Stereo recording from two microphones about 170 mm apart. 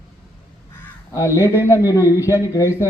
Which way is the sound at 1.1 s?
20° left (ahead or behind).